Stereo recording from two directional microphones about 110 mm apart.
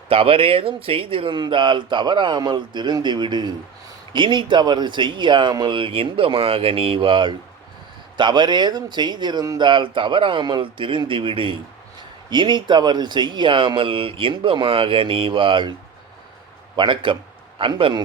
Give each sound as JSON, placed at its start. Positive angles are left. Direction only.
{"t": 0.1, "sound": "speech", "side_deg": -60}
{"t": 16.7, "sound": "speech", "side_deg": -45}